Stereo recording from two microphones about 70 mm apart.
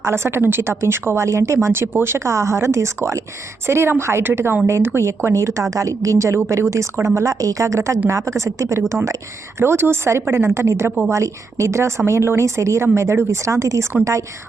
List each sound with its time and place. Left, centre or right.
0.0 s a woman's voice: right
9.6 s a woman's voice: right